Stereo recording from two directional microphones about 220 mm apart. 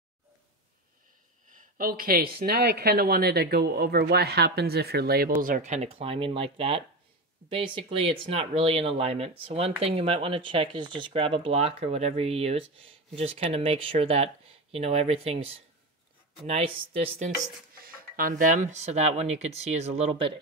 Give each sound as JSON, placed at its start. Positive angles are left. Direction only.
{"t": 1.5, "sound": "speech", "side_deg": -40}
{"t": 17.7, "sound": "speech", "side_deg": -40}